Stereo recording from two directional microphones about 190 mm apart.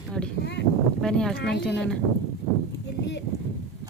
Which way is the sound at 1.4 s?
65° left (ahead or behind).